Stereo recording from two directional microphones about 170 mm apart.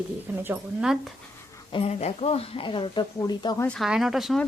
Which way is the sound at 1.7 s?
35° left (ahead or behind).